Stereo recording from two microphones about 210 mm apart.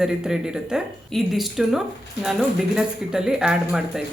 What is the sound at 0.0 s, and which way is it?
Speech, 5° right (ahead or behind).